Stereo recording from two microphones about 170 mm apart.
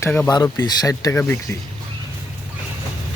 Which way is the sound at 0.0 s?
5° left (ahead or behind).